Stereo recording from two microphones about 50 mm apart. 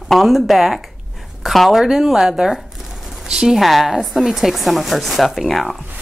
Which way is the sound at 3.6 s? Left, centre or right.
Centre.